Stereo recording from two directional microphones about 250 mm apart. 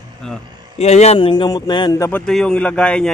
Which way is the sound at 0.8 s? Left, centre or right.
Left.